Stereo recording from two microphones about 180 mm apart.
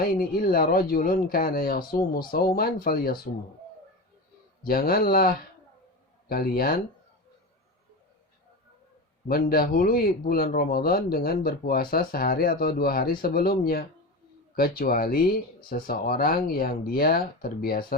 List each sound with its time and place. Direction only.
0.2 s speech: 55° left (ahead or behind)
4.6 s speech: 55° left (ahead or behind)
9.3 s speech: 55° left (ahead or behind)